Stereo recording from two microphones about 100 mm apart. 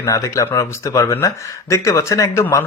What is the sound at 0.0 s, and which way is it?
Speech, 30° left (ahead or behind).